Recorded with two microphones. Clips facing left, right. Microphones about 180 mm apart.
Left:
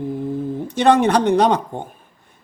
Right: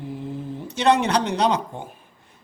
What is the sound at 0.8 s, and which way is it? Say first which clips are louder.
Speech: left 5 dB; 50° left (ahead or behind).